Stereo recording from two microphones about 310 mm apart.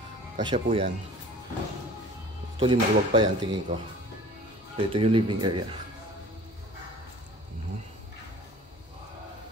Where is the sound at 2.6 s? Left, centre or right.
Centre.